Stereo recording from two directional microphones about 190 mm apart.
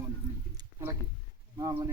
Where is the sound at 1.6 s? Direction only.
20° right (ahead or behind).